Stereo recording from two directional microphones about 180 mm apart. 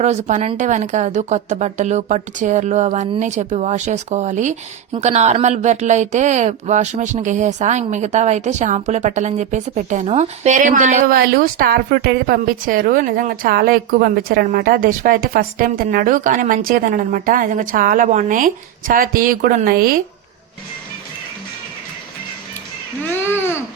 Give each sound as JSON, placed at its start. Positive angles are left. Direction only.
{"t": 0.0, "sound": "speech", "side_deg": -40}
{"t": 23.0, "sound": "speech", "side_deg": 10}